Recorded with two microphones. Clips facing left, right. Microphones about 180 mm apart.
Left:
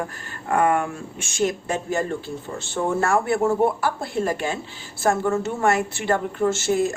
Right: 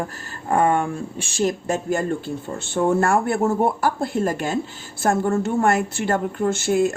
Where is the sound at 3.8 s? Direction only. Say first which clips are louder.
Right 3 dB; 45° right (ahead or behind).